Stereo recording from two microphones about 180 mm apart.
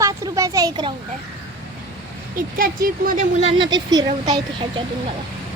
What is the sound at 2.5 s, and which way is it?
Speech, 50° right (ahead or behind).